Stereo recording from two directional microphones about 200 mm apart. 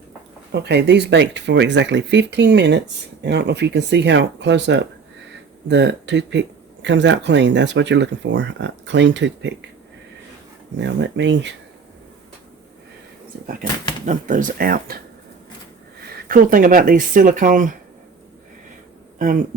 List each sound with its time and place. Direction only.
0.5 s speech: 55° right (ahead or behind)
10.8 s speech: 60° right (ahead or behind)
14.0 s speech: 40° right (ahead or behind)
16.3 s speech: 45° right (ahead or behind)